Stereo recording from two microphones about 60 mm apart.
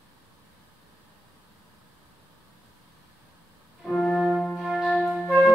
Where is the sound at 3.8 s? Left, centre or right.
Centre.